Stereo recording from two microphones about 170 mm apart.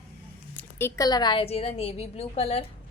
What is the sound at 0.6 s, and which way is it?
A woman's voice, 15° left (ahead or behind).